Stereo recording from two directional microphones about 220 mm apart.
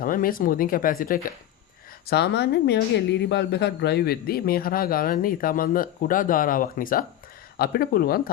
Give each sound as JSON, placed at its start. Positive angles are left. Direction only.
{"t": 0.0, "sound": "speech", "side_deg": 40}